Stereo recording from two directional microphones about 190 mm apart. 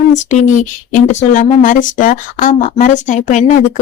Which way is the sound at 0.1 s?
40° left (ahead or behind).